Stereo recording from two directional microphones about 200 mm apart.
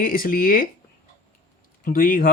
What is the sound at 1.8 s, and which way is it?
Speech, 45° left (ahead or behind).